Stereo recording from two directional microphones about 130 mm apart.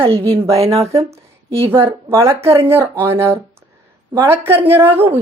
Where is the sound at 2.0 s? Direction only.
20° right (ahead or behind).